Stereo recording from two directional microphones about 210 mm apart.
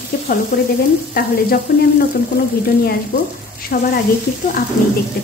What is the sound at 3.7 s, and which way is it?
Speech, 45° left (ahead or behind).